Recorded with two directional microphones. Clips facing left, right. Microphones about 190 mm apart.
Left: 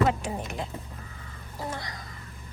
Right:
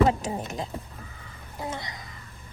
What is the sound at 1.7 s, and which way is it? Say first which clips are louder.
Speech: right 1 dB; 20° right (ahead or behind).